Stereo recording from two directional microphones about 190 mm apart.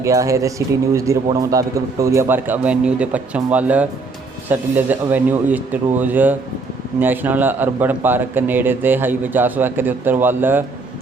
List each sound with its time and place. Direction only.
0.0 s a man's voice: 15° right (ahead or behind)